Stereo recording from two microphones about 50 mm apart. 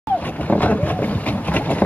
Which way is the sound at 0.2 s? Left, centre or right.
Left.